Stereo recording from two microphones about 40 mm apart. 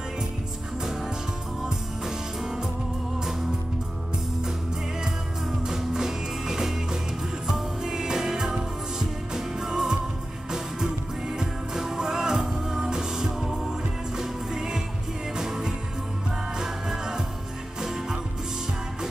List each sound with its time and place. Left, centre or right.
1.6 s music: centre
5.7 s music: centre
11.3 s music: centre